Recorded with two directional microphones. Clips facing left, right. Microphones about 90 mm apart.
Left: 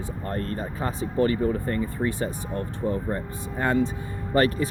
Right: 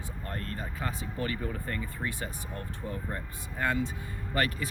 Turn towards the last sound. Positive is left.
turn(degrees=35)  # may be behind; listen again after turning